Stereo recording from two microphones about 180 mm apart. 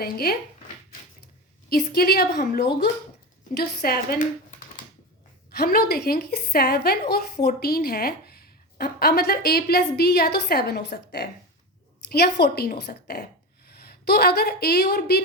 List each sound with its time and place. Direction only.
0.0 s speech: 60° left (ahead or behind)
1.7 s speech: 60° left (ahead or behind)
5.5 s a woman's voice: 55° left (ahead or behind)